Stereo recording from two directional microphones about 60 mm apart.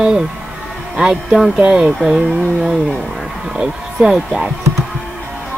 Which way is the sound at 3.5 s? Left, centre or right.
Centre.